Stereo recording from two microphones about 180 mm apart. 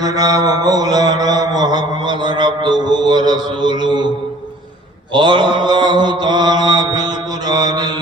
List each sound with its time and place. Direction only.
0.0 s mantra: 20° right (ahead or behind)
5.1 s mantra: 25° right (ahead or behind)